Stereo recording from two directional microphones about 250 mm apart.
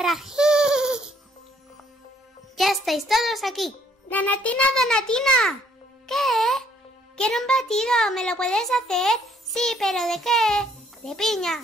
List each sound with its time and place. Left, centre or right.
0.0 s a sound: centre
2.5 s a child's voice: centre
6.0 s music: centre
7.2 s a child's voice: centre